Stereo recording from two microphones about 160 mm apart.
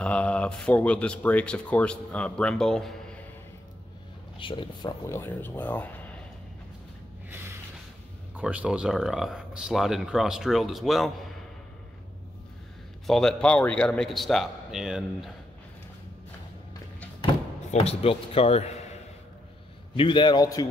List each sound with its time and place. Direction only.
0.0 s speech: 10° left (ahead or behind)
4.4 s speech: 30° left (ahead or behind)
5.0 s speech: 15° left (ahead or behind)
7.2 s a sound: 15° right (ahead or behind)
8.4 s speech: 10° right (ahead or behind)
13.0 s speech: 5° left (ahead or behind)
17.6 s a man's voice: 40° left (ahead or behind)
20.0 s a man's voice: 30° left (ahead or behind)